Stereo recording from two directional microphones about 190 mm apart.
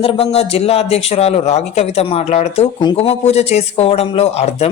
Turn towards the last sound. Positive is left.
turn(degrees=35)  # may be behind; listen again after turning